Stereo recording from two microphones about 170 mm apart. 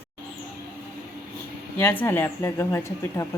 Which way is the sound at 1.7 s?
10° left (ahead or behind).